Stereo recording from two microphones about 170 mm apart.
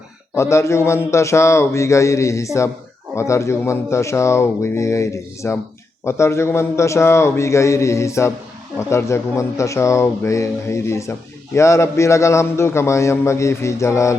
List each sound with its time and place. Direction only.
0.3 s a man's voice: 15° left (ahead or behind)